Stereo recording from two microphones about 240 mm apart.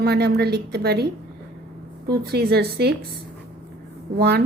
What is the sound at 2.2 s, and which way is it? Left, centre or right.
Speech, right.